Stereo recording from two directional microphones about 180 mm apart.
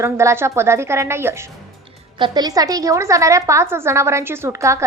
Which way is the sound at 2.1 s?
25° right (ahead or behind).